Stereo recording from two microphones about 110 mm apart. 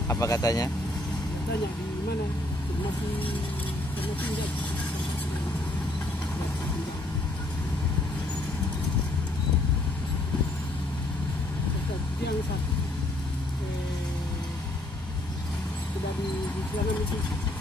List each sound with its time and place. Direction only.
0.1 s speech: 30° left (ahead or behind)